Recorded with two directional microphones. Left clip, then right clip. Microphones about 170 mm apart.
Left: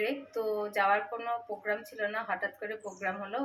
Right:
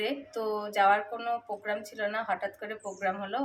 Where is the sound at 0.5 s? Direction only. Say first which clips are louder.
Right 4 dB; 20° right (ahead or behind).